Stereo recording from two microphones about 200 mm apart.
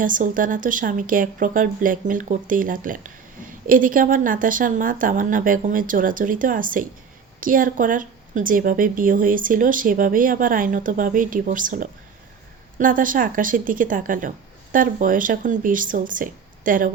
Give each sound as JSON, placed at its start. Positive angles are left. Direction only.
{"t": 0.0, "sound": "speech", "side_deg": -40}